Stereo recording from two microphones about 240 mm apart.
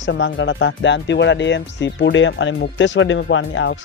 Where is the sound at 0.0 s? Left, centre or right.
Left.